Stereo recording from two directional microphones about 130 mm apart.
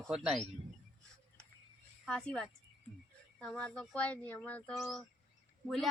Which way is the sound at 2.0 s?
10° left (ahead or behind).